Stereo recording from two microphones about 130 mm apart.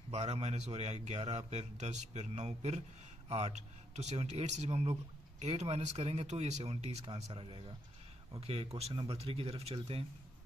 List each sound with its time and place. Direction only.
0.1 s a man's voice: 55° right (ahead or behind)